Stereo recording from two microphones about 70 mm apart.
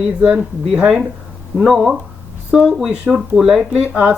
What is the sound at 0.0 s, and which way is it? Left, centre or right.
Speech, centre.